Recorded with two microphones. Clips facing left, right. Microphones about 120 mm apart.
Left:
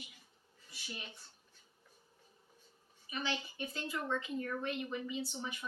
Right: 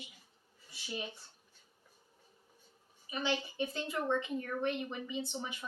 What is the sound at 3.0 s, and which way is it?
A woman's voice, 25° right (ahead or behind).